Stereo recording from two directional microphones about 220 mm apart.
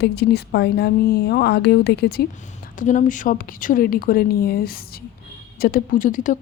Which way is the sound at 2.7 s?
35° left (ahead or behind).